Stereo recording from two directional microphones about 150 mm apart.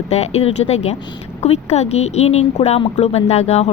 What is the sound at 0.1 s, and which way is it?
A woman's voice, 45° left (ahead or behind).